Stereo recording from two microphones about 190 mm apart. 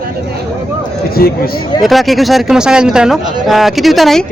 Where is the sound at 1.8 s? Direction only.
Centre (ahead or behind).